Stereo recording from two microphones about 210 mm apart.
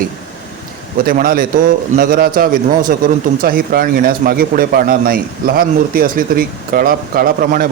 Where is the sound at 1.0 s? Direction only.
45° right (ahead or behind).